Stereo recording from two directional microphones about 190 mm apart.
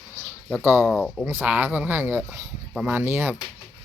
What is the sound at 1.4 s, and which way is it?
Speech, 10° right (ahead or behind).